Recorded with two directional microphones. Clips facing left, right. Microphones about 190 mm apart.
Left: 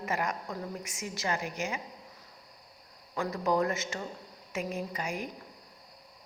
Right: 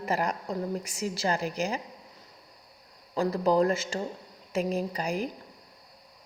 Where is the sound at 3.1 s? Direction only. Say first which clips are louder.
Right 5 dB; 30° right (ahead or behind).